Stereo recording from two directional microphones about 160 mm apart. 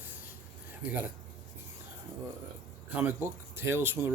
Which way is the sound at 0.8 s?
10° right (ahead or behind).